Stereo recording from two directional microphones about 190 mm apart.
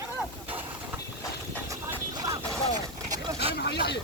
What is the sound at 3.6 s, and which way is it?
Speech, 60° left (ahead or behind).